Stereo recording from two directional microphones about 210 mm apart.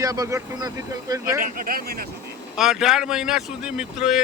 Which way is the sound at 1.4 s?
40° right (ahead or behind).